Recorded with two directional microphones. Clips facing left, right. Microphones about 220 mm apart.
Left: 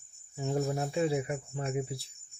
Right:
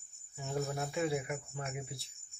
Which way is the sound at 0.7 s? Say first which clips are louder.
Left 5 dB; 30° left (ahead or behind).